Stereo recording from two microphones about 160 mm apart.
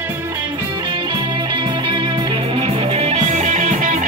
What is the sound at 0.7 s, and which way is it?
Music, 30° right (ahead or behind).